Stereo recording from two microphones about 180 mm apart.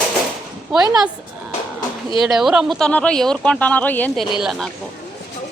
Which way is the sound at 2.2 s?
Centre (ahead or behind).